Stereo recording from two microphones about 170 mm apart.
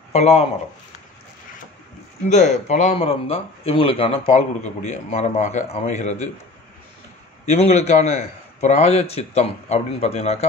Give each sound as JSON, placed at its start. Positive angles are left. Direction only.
{"t": 0.1, "sound": "a man's voice", "side_deg": 40}
{"t": 2.2, "sound": "a man's voice", "side_deg": 45}
{"t": 7.4, "sound": "a man's voice", "side_deg": 40}